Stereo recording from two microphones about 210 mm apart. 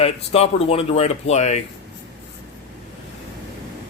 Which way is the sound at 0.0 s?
30° left (ahead or behind).